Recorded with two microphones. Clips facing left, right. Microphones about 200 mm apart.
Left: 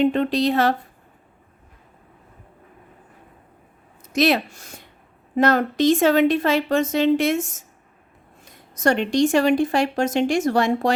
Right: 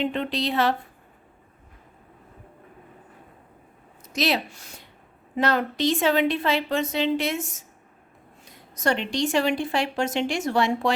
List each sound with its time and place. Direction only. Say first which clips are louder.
0.0 s speech: left 7 dB; 45° left (ahead or behind)
4.0 s speech: left 6 dB; 55° left (ahead or behind)
8.7 s speech: left 6 dB; 45° left (ahead or behind)